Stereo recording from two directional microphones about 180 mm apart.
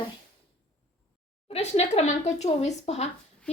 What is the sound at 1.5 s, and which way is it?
A woman's voice, 35° left (ahead or behind).